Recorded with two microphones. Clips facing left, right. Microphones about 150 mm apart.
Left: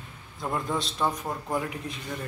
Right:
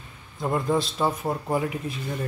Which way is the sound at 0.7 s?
5° right (ahead or behind).